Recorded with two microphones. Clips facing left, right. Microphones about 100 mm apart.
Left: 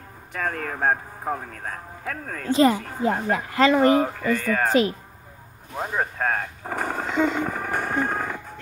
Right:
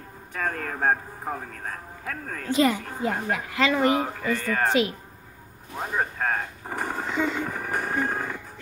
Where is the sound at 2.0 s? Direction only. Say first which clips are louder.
Left 3 dB; 30° left (ahead or behind).